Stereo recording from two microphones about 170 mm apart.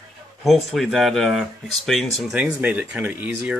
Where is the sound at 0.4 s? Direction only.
Centre (ahead or behind).